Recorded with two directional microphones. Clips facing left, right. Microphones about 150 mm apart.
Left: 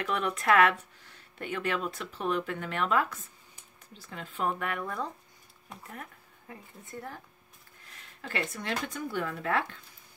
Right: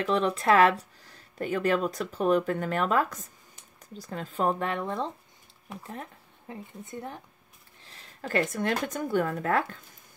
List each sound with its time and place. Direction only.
0.0 s speech: 30° right (ahead or behind)
6.5 s speech: 20° right (ahead or behind)
7.8 s speech: 30° right (ahead or behind)